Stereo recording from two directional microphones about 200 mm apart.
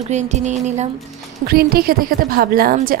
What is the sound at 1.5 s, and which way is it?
A woman's voice, 50° right (ahead or behind).